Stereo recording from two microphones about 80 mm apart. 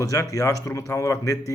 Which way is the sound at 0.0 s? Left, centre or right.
Left.